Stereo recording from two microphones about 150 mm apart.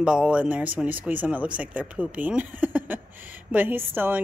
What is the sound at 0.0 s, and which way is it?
Speech, 5° right (ahead or behind).